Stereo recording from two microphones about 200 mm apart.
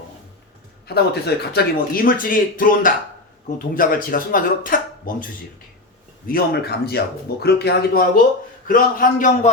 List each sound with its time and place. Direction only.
0.9 s speech: 55° left (ahead or behind)
6.2 s speech: 50° left (ahead or behind)